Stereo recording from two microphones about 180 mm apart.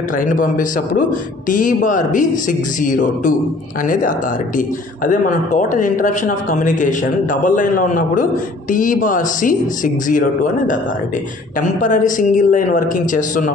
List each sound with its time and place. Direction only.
0.4 s speech: 50° left (ahead or behind)
4.6 s speech: 45° left (ahead or behind)
11.8 s speech: 45° left (ahead or behind)